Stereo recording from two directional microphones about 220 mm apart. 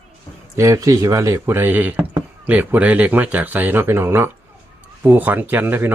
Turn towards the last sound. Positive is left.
turn(degrees=-10)  # may be behind; listen again after turning